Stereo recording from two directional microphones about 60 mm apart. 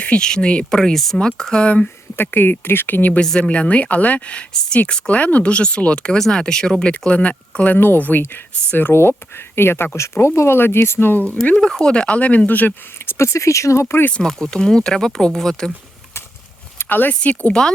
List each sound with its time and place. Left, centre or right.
0.0 s speech: centre
1.6 s speech: left
2.1 s speech: left
3.2 s speech: centre
6.1 s speech: centre; by 11.3 s left
11.5 s speech: centre; by 12.7 s left
13.1 s speech: left
14.1 s speech: centre
16.7 s a sound: left
17.2 s speech: left